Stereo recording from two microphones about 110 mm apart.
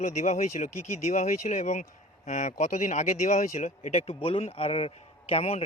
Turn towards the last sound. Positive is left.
turn(degrees=65)  # may be behind; listen again after turning